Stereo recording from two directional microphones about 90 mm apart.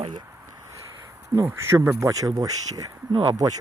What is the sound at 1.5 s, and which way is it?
Speech, 30° right (ahead or behind).